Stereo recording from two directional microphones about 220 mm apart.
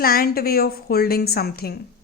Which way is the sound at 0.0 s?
45° left (ahead or behind).